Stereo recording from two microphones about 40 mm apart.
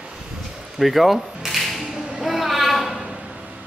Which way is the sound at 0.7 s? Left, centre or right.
Centre.